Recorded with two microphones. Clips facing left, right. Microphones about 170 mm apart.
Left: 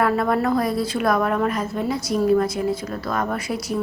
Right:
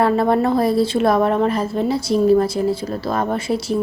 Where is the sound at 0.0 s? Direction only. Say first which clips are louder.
Right 4 dB; 30° right (ahead or behind).